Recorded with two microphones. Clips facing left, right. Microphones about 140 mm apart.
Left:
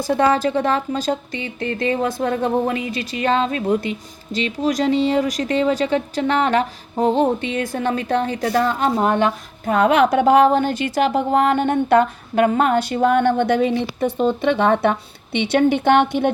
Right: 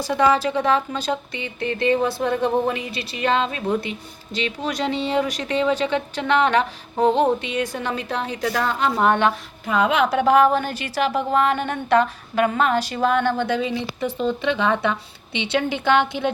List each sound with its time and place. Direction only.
0.0 s a woman's voice: 50° left (ahead or behind)
9.6 s a woman's voice: 50° left (ahead or behind)